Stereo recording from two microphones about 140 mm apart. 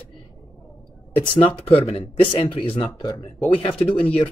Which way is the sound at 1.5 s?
45° left (ahead or behind).